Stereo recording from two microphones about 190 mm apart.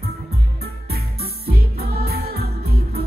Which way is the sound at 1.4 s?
55° right (ahead or behind).